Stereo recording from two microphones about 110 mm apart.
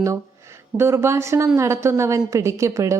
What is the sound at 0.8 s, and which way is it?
A woman's voice, 25° right (ahead or behind).